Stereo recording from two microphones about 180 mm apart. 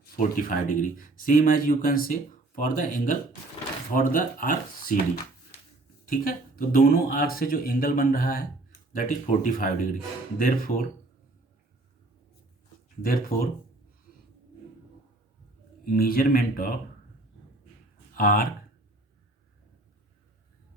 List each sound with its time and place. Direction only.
0.0 s speech: 50° left (ahead or behind)
6.1 s speech: 50° left (ahead or behind)
13.0 s speech: 55° left (ahead or behind)
15.9 s speech: 55° left (ahead or behind)
18.1 s speech: 50° left (ahead or behind)